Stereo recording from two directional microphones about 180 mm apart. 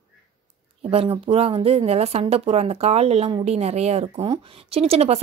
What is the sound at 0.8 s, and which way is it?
A woman's voice, 30° right (ahead or behind).